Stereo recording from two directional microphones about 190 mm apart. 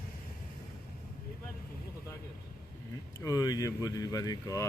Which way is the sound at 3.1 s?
20° left (ahead or behind).